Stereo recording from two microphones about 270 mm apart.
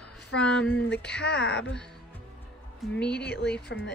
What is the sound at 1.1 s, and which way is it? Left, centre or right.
Speech, left.